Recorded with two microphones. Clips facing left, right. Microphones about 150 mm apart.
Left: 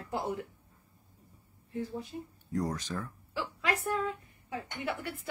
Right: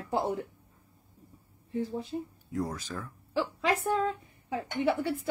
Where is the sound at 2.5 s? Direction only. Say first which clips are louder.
Even; 5° right (ahead or behind).